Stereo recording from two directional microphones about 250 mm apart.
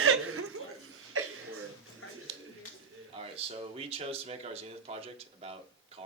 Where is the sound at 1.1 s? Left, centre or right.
Right.